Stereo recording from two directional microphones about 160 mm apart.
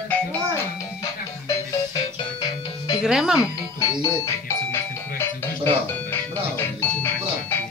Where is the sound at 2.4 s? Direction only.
25° left (ahead or behind).